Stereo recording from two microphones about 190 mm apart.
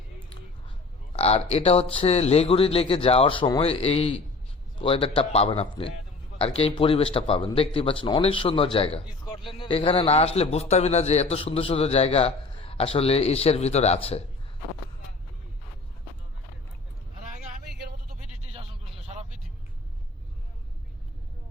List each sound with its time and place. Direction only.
1.1 s a man's voice: 35° left (ahead or behind)
17.7 s vehicle: 60° right (ahead or behind)